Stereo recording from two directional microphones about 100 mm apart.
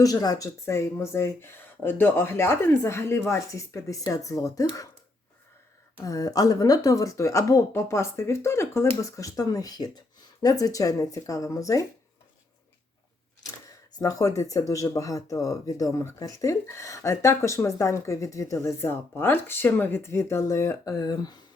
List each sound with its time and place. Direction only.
0.0 s speech: 40° left (ahead or behind)
6.0 s speech: 35° left (ahead or behind)
14.0 s speech: 35° left (ahead or behind)